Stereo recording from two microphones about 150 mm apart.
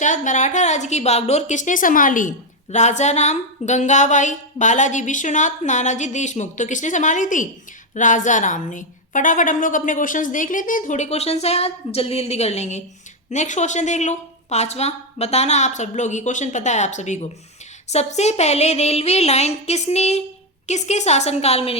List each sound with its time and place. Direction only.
0.0 s speech: 55° left (ahead or behind)
2.6 s a woman's voice: 50° left (ahead or behind)